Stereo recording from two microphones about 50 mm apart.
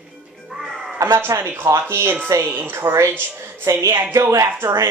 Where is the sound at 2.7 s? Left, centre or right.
Right.